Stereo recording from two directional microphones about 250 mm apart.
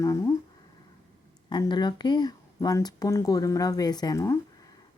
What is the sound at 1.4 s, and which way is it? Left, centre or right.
Speech, centre.